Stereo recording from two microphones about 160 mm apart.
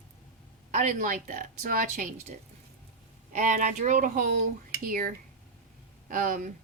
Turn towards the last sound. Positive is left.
turn(degrees=-60)  # may be behind; listen again after turning